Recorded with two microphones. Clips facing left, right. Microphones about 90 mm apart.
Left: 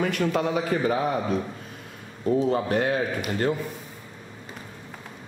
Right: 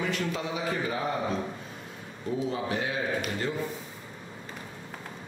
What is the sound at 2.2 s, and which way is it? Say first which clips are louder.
Speech: left 8 dB; 55° left (ahead or behind).